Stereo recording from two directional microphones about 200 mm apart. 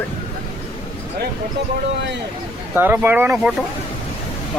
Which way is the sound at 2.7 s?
10° right (ahead or behind).